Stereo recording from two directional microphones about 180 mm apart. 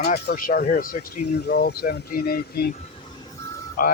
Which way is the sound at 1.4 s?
65° left (ahead or behind).